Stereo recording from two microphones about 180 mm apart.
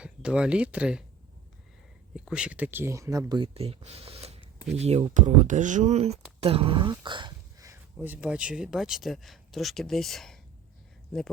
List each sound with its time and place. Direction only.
0.0 s speech: 5° right (ahead or behind)
2.1 s speech: 5° right (ahead or behind); by 6.1 s 35° right (ahead or behind)
6.4 s dog: 30° right (ahead or behind)
7.9 s speech: 10° right (ahead or behind)